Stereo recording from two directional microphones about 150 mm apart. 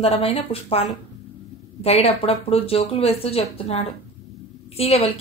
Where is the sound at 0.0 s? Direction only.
40° left (ahead or behind).